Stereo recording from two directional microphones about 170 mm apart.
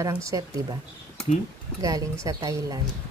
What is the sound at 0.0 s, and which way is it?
Speech, 20° right (ahead or behind).